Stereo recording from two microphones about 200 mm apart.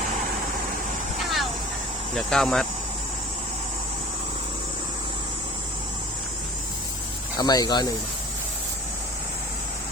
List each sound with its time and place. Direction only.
1.2 s vehicle: centre (ahead or behind)
2.1 s speech: 5° left (ahead or behind)
7.3 s speech: 20° left (ahead or behind)